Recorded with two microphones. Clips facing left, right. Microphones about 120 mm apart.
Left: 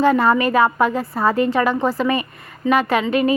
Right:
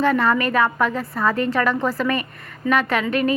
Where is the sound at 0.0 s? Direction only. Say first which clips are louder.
Left 3 dB; 30° left (ahead or behind).